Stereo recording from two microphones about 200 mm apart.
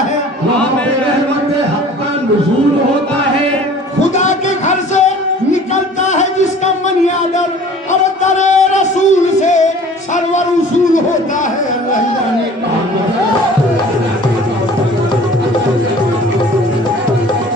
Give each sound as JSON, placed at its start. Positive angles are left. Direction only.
{"t": 4.1, "sound": "music", "side_deg": 35}
{"t": 8.2, "sound": "music", "side_deg": 35}